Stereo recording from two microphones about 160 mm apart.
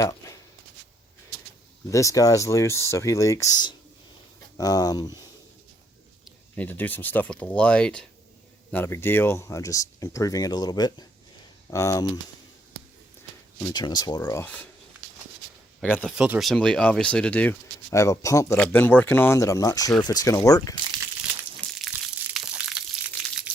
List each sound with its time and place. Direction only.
0.0 s a sound: 20° left (ahead or behind)
1.9 s speech: 20° left (ahead or behind)
6.6 s speech: 10° left (ahead or behind)
13.6 s speech: 20° left (ahead or behind)
14.3 s speech: 15° left (ahead or behind)
15.8 s speech: 10° left (ahead or behind)
16.1 s speech: 5° right (ahead or behind); by 18.5 s 20° left (ahead or behind)
18.5 s speech: 10° left (ahead or behind)
21.8 s crushing: 5° right (ahead or behind)